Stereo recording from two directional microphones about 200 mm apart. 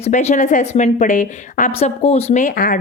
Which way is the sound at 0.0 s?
35° left (ahead or behind).